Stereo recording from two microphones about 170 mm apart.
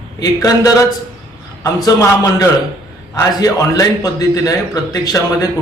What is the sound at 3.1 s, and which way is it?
A man's voice, 20° left (ahead or behind).